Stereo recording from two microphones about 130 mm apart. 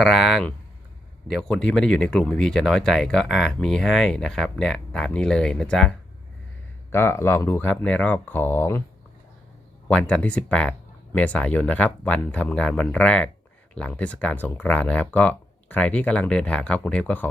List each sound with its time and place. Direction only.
0.0 s speech: centre (ahead or behind)
6.9 s speech: 20° left (ahead or behind)
9.9 s speech: 10° left (ahead or behind)